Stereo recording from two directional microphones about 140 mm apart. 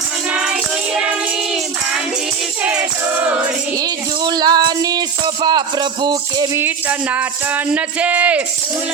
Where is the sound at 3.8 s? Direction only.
30° right (ahead or behind).